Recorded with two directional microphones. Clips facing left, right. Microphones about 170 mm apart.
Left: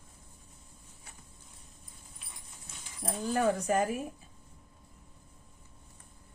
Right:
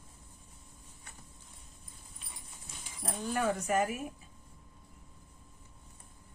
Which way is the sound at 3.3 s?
35° left (ahead or behind).